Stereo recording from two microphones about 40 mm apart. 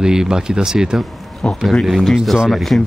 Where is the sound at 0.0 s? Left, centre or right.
Centre.